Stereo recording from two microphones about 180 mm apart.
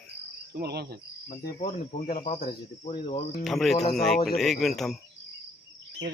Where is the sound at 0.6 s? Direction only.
65° right (ahead or behind).